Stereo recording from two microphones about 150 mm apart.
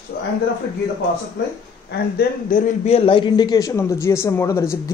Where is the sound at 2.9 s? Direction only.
35° left (ahead or behind); by 4.7 s 20° left (ahead or behind).